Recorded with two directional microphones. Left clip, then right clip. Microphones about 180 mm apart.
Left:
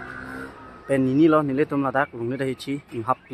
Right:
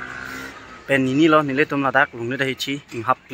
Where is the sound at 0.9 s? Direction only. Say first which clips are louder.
Right 3 dB; 5° left (ahead or behind).